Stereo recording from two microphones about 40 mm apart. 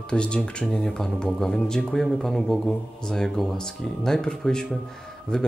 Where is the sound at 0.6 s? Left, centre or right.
Centre.